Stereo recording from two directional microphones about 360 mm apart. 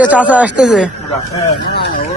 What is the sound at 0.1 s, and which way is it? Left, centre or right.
Speech, centre.